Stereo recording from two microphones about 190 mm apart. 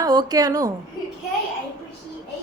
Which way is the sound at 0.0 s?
20° right (ahead or behind).